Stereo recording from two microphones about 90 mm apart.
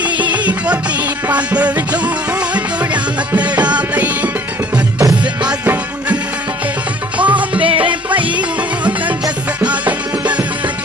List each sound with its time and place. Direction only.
0.3 s music: 15° right (ahead or behind)
7.2 s music: 15° right (ahead or behind)
7.6 s music: 80° right
8.4 s music: 15° right (ahead or behind)